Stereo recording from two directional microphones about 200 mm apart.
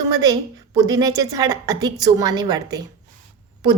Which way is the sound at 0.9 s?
20° right (ahead or behind).